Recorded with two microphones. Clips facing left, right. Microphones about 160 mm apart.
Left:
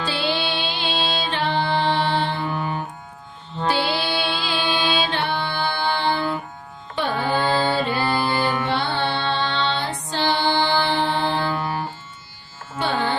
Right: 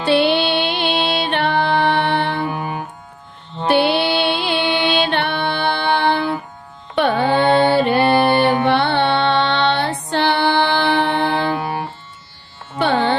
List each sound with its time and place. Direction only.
0.0 s music: 65° right (ahead or behind)
2.4 s music: 15° right (ahead or behind)
3.7 s music: 65° right (ahead or behind)
11.4 s music: 20° right (ahead or behind)
12.8 s carnatic music: 65° right (ahead or behind)